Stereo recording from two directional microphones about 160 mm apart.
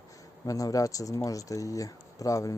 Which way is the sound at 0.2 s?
20° left (ahead or behind).